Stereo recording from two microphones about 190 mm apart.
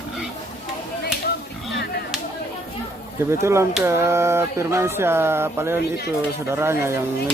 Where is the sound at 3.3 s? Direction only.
15° right (ahead or behind).